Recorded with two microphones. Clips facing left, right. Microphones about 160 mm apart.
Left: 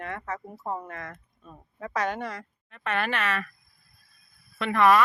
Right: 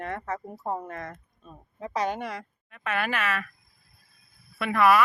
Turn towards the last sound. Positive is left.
turn(degrees=-10)  # may be behind; listen again after turning